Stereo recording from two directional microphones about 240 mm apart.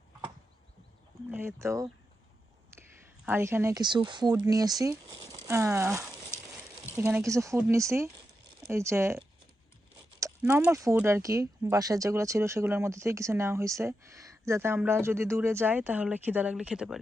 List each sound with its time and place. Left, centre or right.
1.3 s speech: centre
3.2 s speech: centre